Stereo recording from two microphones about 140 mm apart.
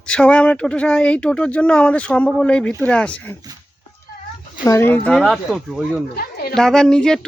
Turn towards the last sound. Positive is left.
turn(degrees=5)  # may be behind; listen again after turning